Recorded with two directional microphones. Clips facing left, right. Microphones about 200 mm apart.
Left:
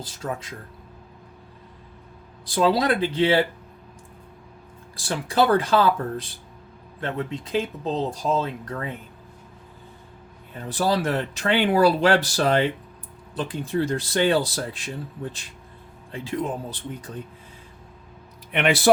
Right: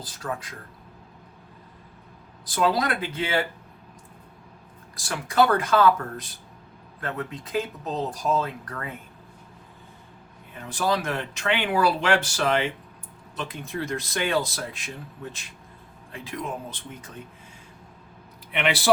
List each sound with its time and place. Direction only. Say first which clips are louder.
0.2 s speech: left 2 dB; 25° left (ahead or behind)
2.6 s speech: left 4 dB; 30° left (ahead or behind)
4.9 s speech: even; 30° left (ahead or behind)
10.7 s speech: left 3 dB; 35° left (ahead or behind)